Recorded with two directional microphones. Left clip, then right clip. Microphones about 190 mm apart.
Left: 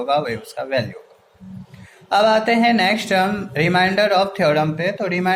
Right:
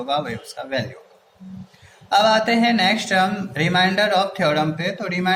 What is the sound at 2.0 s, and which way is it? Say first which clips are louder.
A man's voice: left 1 dB; 35° left (ahead or behind).